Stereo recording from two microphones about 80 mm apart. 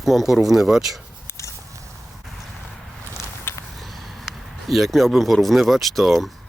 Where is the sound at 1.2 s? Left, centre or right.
Left.